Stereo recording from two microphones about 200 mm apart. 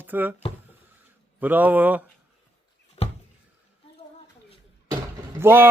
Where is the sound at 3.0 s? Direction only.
30° left (ahead or behind).